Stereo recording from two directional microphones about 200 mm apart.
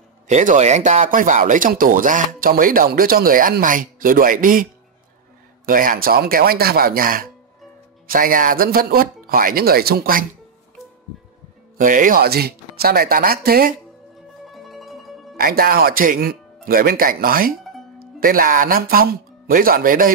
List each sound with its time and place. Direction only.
0.3 s speech: 35° right (ahead or behind)
5.7 s speech: 45° right (ahead or behind)
11.8 s speech: 40° right (ahead or behind)
14.4 s music: centre (ahead or behind)
15.3 s speech: 50° right (ahead or behind)